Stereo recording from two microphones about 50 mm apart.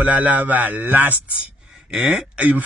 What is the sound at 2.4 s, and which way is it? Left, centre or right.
Speech, right.